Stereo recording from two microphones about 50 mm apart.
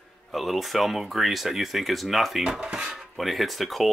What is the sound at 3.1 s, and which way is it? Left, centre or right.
Speech, centre.